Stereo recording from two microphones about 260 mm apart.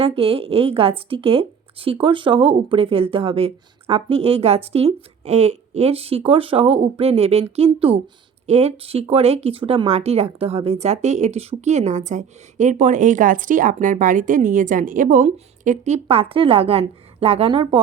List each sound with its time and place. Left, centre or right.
0.0 s speech: right